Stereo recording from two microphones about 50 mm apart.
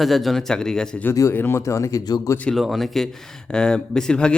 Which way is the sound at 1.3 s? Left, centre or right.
Left.